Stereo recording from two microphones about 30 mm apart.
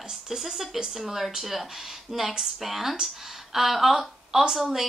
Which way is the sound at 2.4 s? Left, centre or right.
Centre.